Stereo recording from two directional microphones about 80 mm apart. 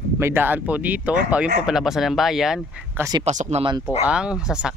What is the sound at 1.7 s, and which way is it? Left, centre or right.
Speech, centre.